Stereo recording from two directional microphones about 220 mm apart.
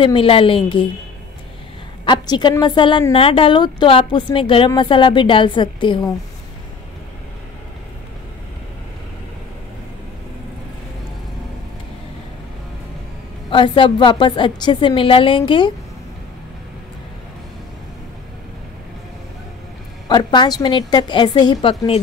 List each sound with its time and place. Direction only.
0.0 s a woman's voice: 25° left (ahead or behind)
2.0 s a woman's voice: 20° left (ahead or behind)
13.5 s a woman's voice: 20° left (ahead or behind)
20.1 s a woman's voice: 20° left (ahead or behind)